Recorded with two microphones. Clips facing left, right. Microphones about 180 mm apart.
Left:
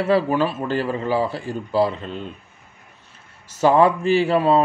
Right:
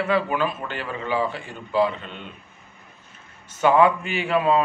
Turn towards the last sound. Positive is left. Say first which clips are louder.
# left 4 dB
turn(degrees=35)  # may be behind; listen again after turning